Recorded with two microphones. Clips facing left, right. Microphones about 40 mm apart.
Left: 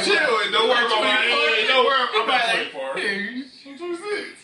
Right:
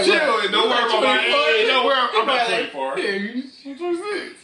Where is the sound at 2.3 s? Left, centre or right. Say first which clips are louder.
Even; centre.